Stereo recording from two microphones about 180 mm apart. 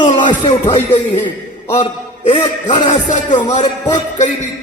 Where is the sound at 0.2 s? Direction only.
30° left (ahead or behind).